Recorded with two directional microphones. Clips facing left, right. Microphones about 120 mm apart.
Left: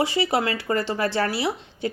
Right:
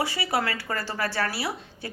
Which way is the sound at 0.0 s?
20° left (ahead or behind).